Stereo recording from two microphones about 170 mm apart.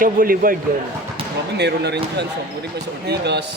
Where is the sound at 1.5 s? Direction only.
80° right.